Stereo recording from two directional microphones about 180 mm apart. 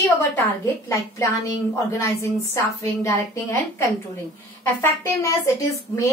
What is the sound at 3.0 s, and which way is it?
Speech, 15° left (ahead or behind).